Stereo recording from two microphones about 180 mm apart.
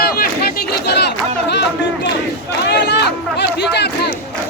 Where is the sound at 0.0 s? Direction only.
60° left (ahead or behind).